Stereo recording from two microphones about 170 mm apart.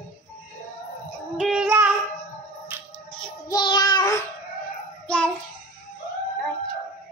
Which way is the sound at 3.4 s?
25° left (ahead or behind).